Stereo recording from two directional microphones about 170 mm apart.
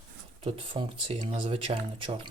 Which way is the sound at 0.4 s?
30° right (ahead or behind).